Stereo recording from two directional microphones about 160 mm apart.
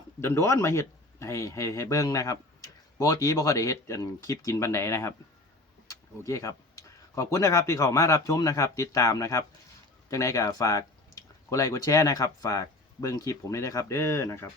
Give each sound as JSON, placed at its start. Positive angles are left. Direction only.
{"t": 0.2, "sound": "speech", "side_deg": 15}